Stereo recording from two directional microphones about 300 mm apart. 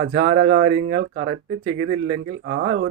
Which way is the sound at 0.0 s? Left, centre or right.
Right.